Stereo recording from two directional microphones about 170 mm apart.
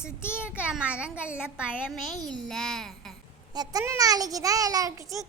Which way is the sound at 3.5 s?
20° right (ahead or behind).